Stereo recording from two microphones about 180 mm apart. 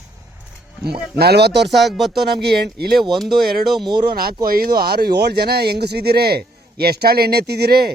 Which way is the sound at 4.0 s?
60° right (ahead or behind).